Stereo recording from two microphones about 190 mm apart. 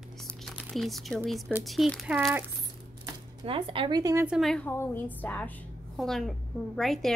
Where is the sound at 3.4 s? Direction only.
30° right (ahead or behind).